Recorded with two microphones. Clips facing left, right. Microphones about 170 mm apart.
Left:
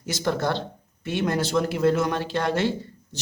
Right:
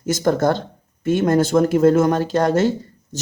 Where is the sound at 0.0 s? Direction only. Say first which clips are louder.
Right 8 dB; 45° right (ahead or behind).